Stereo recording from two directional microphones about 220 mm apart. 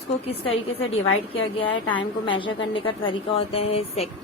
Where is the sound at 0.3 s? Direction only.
25° left (ahead or behind).